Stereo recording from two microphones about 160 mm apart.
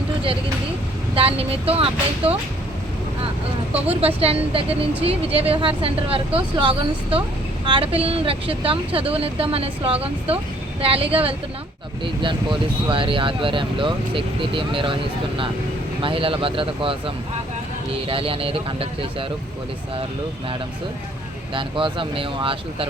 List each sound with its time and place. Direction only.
1.1 s speech: 35° right (ahead or behind)
4.0 s speech: 35° right (ahead or behind)
16.0 s speech: 35° right (ahead or behind)
18.1 s speech: 35° right (ahead or behind)
21.5 s speech: 30° right (ahead or behind)